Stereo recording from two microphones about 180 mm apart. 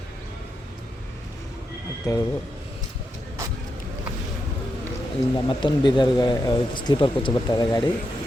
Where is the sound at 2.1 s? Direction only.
20° left (ahead or behind).